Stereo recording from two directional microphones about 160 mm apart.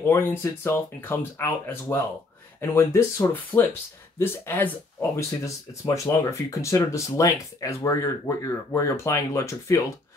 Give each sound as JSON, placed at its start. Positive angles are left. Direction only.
{"t": 0.0, "sound": "speech", "side_deg": 15}